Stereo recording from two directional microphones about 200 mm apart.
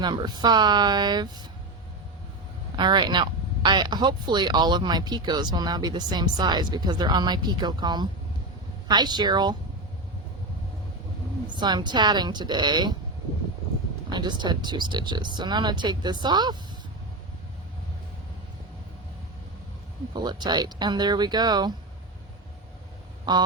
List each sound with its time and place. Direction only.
0.0 s speech: 20° right (ahead or behind)
2.7 s speech: 20° right (ahead or behind)
11.4 s speech: 20° right (ahead or behind)
14.1 s speech: 20° right (ahead or behind)
20.1 s speech: 20° right (ahead or behind)
23.3 s speech: 20° right (ahead or behind)